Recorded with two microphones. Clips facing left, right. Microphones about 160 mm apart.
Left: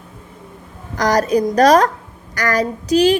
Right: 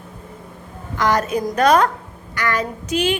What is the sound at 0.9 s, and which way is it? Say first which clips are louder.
A woman's voice: left 4 dB; 40° left (ahead or behind).